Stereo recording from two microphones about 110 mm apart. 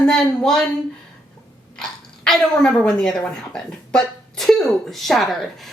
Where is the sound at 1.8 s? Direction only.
5° left (ahead or behind).